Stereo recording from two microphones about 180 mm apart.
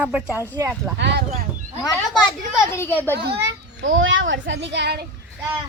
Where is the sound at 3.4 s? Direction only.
80° right.